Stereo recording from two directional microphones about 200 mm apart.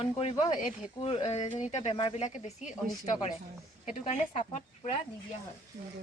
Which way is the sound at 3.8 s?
40° left (ahead or behind).